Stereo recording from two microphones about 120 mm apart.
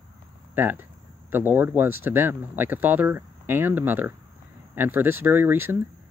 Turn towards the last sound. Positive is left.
turn(degrees=-20)  # may be behind; listen again after turning